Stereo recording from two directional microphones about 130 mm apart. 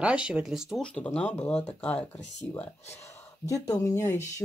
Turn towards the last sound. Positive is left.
turn(degrees=20)  # may be behind; listen again after turning